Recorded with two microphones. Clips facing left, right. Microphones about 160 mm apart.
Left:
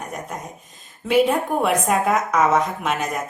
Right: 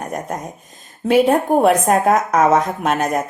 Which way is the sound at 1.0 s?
45° right (ahead or behind).